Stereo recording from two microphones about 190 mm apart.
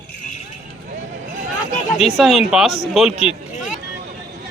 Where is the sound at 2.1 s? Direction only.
Centre (ahead or behind).